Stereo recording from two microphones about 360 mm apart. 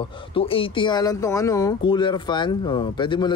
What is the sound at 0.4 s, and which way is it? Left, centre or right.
Speech, centre.